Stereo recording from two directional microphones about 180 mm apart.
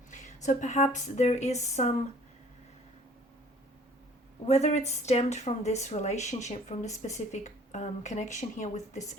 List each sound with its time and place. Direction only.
0.1 s speech: 40° left (ahead or behind)
4.4 s speech: 35° left (ahead or behind)